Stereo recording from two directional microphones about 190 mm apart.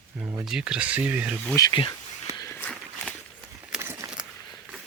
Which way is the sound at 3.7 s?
10° right (ahead or behind).